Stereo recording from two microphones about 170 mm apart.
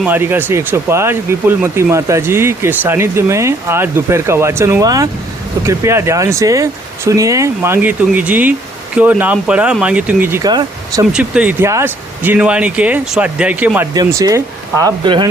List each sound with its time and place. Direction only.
0.0 s speech: 10° right (ahead or behind)
10.5 s speech: 25° right (ahead or behind)
11.1 s speech: 5° right (ahead or behind)
13.9 s speech: 20° right (ahead or behind)